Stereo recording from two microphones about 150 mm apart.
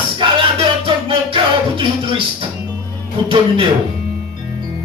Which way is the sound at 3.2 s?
35° right (ahead or behind).